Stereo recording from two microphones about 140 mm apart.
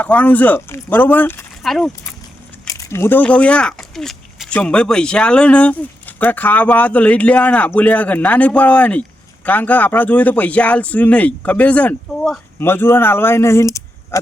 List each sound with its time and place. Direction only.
0.0 s speech: 10° left (ahead or behind)
1.6 s speech: centre (ahead or behind)
2.6 s speech: 20° left (ahead or behind)